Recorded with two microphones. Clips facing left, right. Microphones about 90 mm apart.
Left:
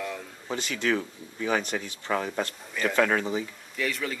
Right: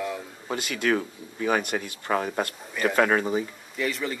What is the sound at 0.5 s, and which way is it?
Speech, 55° right (ahead or behind).